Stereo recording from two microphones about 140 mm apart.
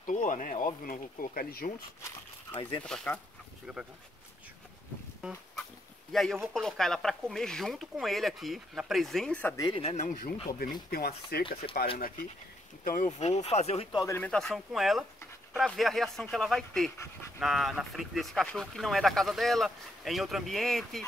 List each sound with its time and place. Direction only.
0.0 s speech: 65° left (ahead or behind)
0.8 s speech: 90° left
2.5 s speech: 40° left (ahead or behind)
2.8 s speech: 5° left (ahead or behind)
6.4 s speech: 5° left (ahead or behind)
9.6 s speech: 40° left (ahead or behind)
9.9 s speech: 75° left (ahead or behind)
10.6 s speech: 90° left
12.8 s speech: 85° left
13.2 s speech: 50° left (ahead or behind)
13.9 s speech: 20° left (ahead or behind)
14.2 s speech: 5° left (ahead or behind)